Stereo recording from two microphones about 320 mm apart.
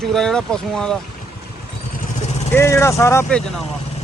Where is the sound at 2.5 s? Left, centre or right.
Centre.